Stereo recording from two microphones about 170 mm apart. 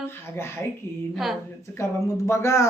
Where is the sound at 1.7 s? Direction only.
15° left (ahead or behind).